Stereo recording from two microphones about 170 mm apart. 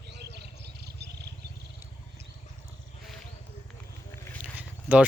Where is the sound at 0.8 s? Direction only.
75° right (ahead or behind).